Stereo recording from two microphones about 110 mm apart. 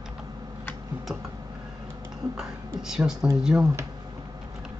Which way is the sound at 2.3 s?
5° right (ahead or behind).